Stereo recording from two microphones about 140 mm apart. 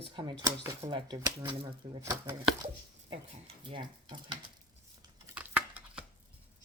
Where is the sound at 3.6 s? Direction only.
35° right (ahead or behind).